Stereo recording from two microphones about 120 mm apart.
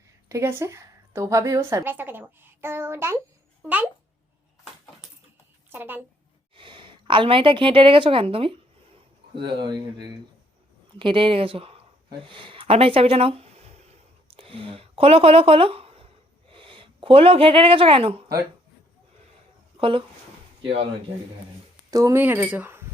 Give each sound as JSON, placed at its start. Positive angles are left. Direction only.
{"t": 0.3, "sound": "a woman's voice", "side_deg": -25}
{"t": 5.7, "sound": "speech", "side_deg": -15}
{"t": 6.6, "sound": "a woman's voice", "side_deg": -45}
{"t": 14.3, "sound": "a woman's voice", "side_deg": -50}
{"t": 19.7, "sound": "speech", "side_deg": -45}
{"t": 21.8, "sound": "speech", "side_deg": -30}
{"t": 22.2, "sound": "speech", "side_deg": -15}